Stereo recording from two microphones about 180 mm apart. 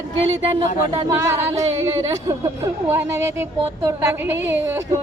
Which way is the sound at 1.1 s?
15° right (ahead or behind).